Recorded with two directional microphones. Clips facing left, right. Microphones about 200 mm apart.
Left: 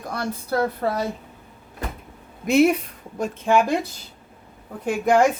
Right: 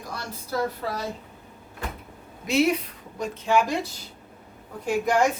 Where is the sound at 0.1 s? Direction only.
55° left (ahead or behind).